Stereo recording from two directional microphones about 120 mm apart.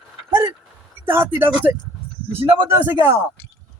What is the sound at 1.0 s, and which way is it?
Speech, 15° right (ahead or behind).